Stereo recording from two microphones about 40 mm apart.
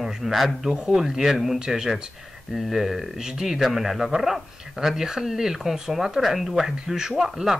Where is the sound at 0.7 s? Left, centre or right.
Right.